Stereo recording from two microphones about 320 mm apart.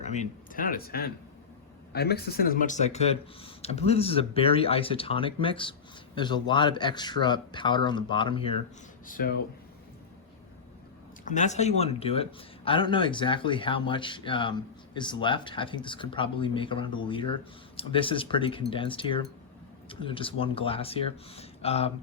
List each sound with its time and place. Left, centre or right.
0.0 s speech: left
9.0 s speech: left
11.3 s speech: left